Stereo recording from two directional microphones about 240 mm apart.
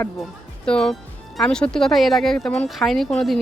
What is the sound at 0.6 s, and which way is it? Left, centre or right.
Speech, centre.